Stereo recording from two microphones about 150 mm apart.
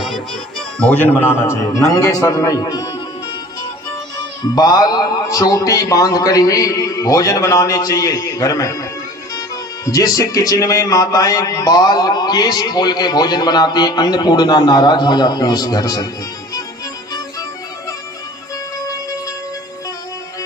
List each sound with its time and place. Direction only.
0.8 s speech: 10° left (ahead or behind); by 2.9 s 25° left (ahead or behind)
4.5 s speech: 25° left (ahead or behind)